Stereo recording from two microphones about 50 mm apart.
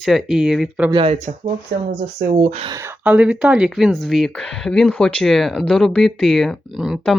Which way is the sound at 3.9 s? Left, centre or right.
Centre.